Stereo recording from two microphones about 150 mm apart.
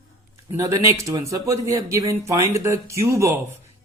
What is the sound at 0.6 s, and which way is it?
Speech, 20° right (ahead or behind).